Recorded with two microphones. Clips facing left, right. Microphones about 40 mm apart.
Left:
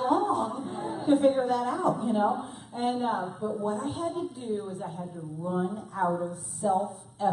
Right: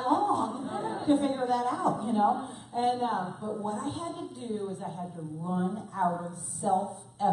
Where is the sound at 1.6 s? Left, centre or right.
Left.